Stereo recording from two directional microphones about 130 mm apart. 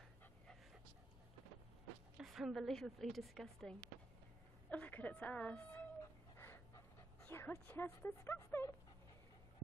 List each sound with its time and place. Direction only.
2.1 s a woman's voice: 5° right (ahead or behind)
4.6 s speech: 10° left (ahead or behind)
6.3 s a sound: 20° left (ahead or behind)
7.2 s speech: 15° left (ahead or behind)